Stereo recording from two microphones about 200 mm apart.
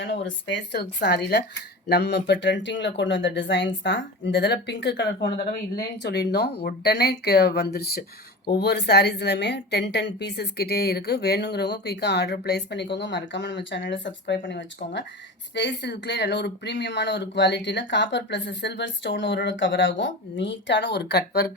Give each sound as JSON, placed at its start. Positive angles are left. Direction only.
{"t": 0.0, "sound": "a woman's voice", "side_deg": 65}